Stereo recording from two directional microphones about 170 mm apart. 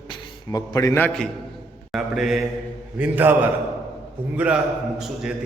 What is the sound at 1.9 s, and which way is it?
Mantra, centre (ahead or behind).